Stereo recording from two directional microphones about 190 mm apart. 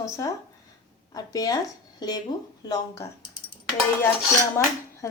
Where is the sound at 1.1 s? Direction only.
20° left (ahead or behind).